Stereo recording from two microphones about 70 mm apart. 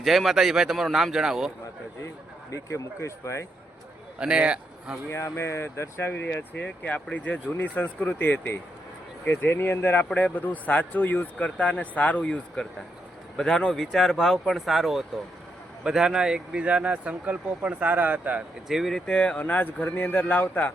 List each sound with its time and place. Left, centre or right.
0.0 s speech: centre
2.5 s speech: left
4.2 s a man's voice: centre
5.0 s speech: left; by 18.4 s right
18.7 s speech: centre
19.0 s speech: centre
19.4 s speech: left